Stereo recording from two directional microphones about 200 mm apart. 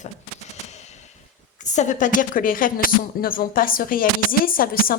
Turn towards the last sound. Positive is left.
turn(degrees=45)  # may be behind; listen again after turning